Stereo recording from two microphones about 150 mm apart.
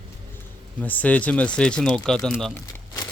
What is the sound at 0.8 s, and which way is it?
Speech, 10° left (ahead or behind).